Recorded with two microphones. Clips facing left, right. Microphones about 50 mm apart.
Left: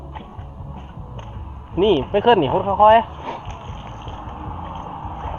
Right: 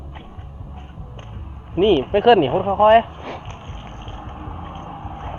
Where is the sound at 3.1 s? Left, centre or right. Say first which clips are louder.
Left 2 dB; right.